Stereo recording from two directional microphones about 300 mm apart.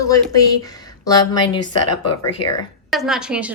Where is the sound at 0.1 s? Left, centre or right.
Centre.